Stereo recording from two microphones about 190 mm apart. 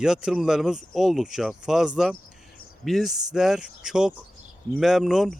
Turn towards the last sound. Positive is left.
turn(degrees=0)  # may be behind; listen again after turning